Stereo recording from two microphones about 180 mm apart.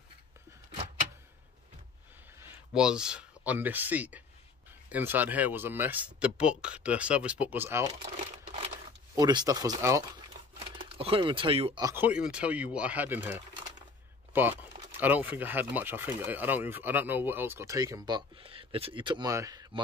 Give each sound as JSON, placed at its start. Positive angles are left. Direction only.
{"t": 2.3, "sound": "speech", "side_deg": -10}
{"t": 8.2, "sound": "a sound", "side_deg": -35}
{"t": 9.1, "sound": "speech", "side_deg": -20}
{"t": 10.6, "sound": "speech", "side_deg": -30}
{"t": 11.8, "sound": "speech", "side_deg": -10}